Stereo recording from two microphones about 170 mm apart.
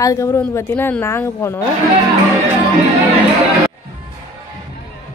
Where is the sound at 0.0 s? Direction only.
20° left (ahead or behind).